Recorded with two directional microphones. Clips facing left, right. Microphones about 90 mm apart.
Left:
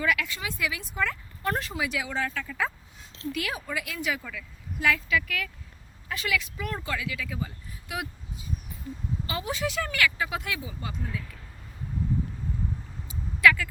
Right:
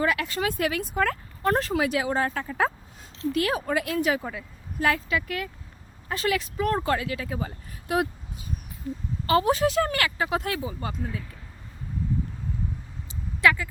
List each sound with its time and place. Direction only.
0.0 s speech: 40° right (ahead or behind)
0.3 s speech: 50° right (ahead or behind)
13.1 s a sound: 30° right (ahead or behind)